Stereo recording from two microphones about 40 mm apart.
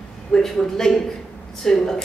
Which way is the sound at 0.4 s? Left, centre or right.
Centre.